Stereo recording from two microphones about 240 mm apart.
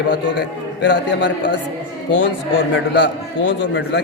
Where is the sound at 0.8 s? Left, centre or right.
Left.